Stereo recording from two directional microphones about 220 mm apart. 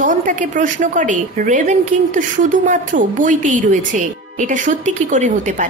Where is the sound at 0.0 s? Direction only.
35° right (ahead or behind).